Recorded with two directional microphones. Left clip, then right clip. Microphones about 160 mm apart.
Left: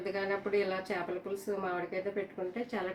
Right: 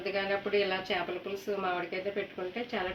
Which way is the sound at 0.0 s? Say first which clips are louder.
Right 2 dB; 20° left (ahead or behind).